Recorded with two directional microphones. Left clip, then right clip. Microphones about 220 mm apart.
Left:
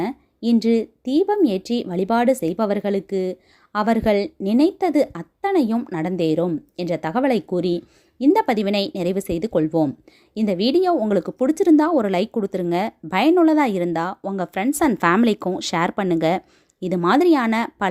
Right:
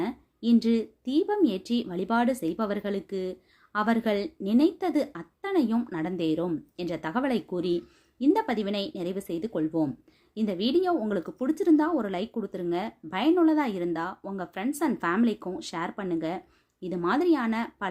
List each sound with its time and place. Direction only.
0.0 s speech: 30° left (ahead or behind)